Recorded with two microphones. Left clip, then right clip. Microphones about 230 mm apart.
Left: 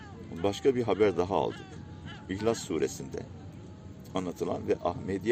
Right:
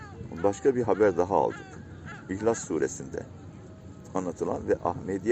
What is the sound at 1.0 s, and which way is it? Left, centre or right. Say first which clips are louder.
Speech: right 3 dB; left.